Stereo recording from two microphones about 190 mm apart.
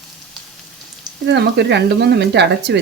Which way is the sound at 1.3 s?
65° right (ahead or behind).